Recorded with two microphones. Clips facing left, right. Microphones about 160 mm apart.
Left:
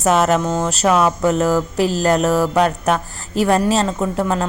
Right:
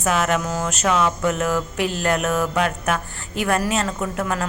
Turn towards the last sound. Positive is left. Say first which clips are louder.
# left 5 dB
turn(degrees=30)  # may be behind; listen again after turning